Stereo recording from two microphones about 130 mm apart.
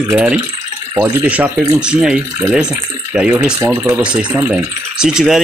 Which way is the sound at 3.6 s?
20° right (ahead or behind).